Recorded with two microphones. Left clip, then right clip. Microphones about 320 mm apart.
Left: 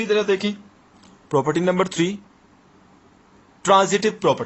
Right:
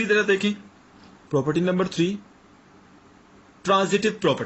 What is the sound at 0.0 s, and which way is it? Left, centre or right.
Speech, centre.